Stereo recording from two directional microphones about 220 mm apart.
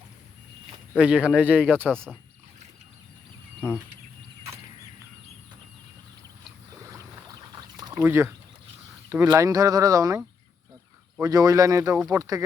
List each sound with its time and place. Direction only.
0.9 s speech: 5° right (ahead or behind)
6.9 s boat: 15° right (ahead or behind)
7.8 s a sound: 15° right (ahead or behind)
9.0 s speech: 15° right (ahead or behind)